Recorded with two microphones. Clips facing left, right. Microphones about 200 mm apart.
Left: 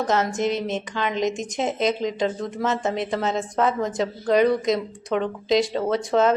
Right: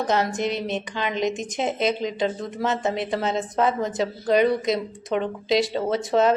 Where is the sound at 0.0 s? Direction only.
20° right (ahead or behind).